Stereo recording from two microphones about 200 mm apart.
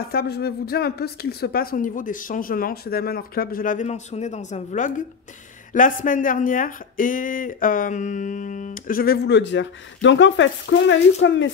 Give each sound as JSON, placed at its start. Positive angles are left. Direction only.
{"t": 0.0, "sound": "speech", "side_deg": 50}